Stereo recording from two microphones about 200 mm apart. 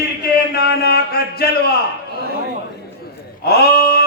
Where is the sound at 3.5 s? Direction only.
50° left (ahead or behind).